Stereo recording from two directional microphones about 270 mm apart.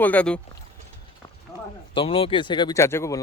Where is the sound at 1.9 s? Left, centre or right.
Centre.